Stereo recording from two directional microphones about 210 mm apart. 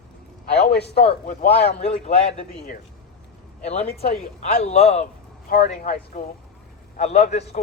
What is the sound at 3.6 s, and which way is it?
A man's voice, 30° left (ahead or behind).